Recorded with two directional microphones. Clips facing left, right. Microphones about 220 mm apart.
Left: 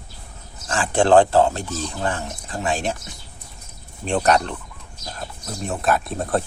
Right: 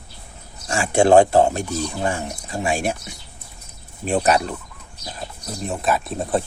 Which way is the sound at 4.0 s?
5° right (ahead or behind).